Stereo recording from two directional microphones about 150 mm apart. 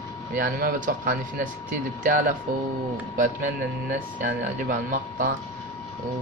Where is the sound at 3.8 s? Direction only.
60° right (ahead or behind).